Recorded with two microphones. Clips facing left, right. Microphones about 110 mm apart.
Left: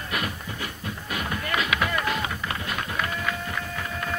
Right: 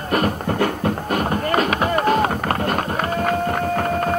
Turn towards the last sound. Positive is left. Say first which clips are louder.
# right 12 dB
turn(degrees=-50)  # may be behind; listen again after turning